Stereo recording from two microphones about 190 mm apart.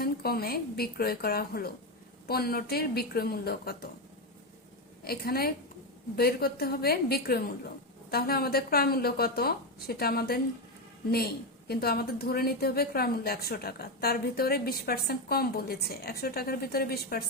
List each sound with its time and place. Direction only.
0.0 s a woman's voice: 55° left (ahead or behind)
5.0 s a woman's voice: 55° left (ahead or behind)
11.7 s a woman's voice: 55° left (ahead or behind)